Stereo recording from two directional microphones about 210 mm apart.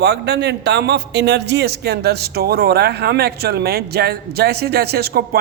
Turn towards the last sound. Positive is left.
turn(degrees=-45)  # may be behind; listen again after turning